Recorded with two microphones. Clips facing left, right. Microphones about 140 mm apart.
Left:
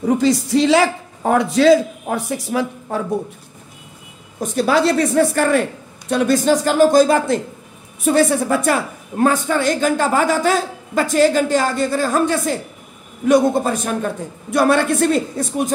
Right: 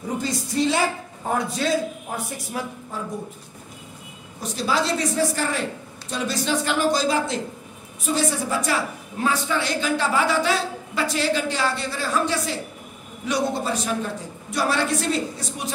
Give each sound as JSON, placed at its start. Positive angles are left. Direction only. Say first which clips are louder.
{"t": 0.2, "sound": "a man's voice", "louder": "left 8 dB", "side_deg": 90}
{"t": 4.4, "sound": "a woman's voice", "louder": "left 8 dB", "side_deg": 55}